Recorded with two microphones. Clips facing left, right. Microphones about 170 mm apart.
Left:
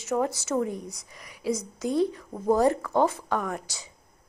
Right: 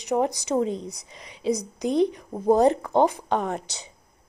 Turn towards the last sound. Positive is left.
turn(degrees=-20)  # may be behind; listen again after turning